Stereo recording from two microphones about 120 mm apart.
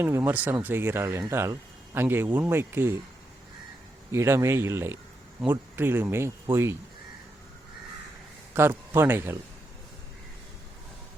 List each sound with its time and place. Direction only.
0.0 s speech: 20° right (ahead or behind)
4.1 s speech: 25° right (ahead or behind)
8.5 s speech: 20° right (ahead or behind)